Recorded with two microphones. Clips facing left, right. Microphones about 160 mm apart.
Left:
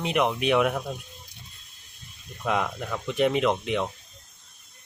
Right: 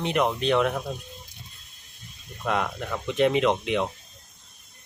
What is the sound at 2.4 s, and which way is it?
Speech, centre (ahead or behind).